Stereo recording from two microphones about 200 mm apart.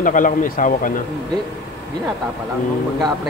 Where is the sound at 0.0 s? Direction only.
40° left (ahead or behind).